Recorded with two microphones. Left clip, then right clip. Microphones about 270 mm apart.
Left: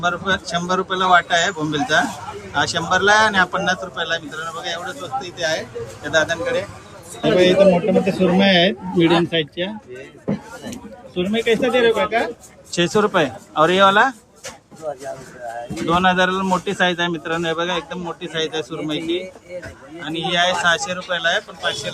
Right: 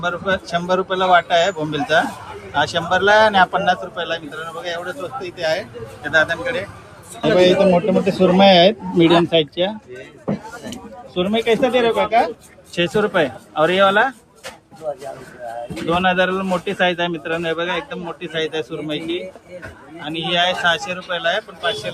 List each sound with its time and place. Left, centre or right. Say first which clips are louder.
0.0 s a man's voice: left 1 dB; centre
8.4 s speech: right 4 dB; right
9.0 s a man's voice: right 3 dB; centre
9.6 s a sound: right 5 dB; centre
11.2 s a man's voice: right 2 dB; centre
15.9 s a man's voice: left 1 dB; centre